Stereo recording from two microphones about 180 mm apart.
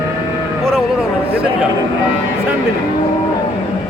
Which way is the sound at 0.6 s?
5° right (ahead or behind).